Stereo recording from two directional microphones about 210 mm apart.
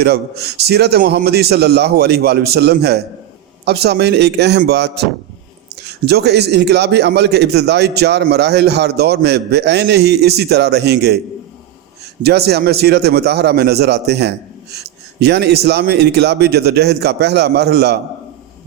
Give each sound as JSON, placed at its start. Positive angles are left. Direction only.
{"t": 0.0, "sound": "a man's voice", "side_deg": -50}
{"t": 6.1, "sound": "a man's voice", "side_deg": -50}
{"t": 12.2, "sound": "a man's voice", "side_deg": -50}